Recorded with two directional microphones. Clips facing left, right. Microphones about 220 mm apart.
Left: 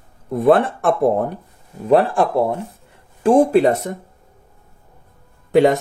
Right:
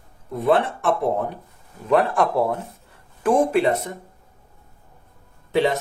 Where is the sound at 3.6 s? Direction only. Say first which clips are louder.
Left 5 dB; 45° left (ahead or behind).